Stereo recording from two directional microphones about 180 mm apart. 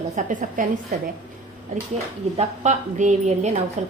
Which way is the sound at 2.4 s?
40° right (ahead or behind).